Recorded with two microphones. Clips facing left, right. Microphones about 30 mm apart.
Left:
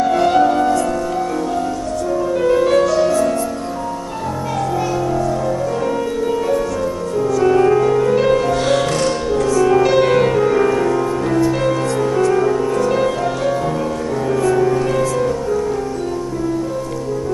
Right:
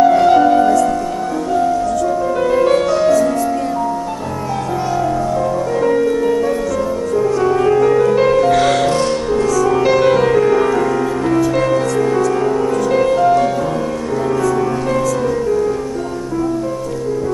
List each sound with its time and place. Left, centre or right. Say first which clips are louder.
0.0 s music: right 4 dB; centre
2.4 s music: right 1 dB; centre
7.6 s music: right 2 dB; centre
9.5 s music: left 2 dB; left
9.8 s music: right 1 dB; centre
10.3 s music: right 2 dB; centre